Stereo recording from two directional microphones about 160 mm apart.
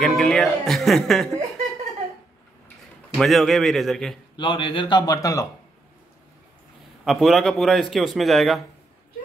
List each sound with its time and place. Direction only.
0.0 s speech: 5° left (ahead or behind)
3.2 s a man's voice: centre (ahead or behind)
4.4 s a man's voice: 30° left (ahead or behind)
7.1 s a man's voice: centre (ahead or behind)